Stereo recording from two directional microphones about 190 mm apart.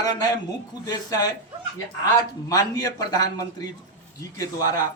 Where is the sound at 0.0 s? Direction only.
20° left (ahead or behind).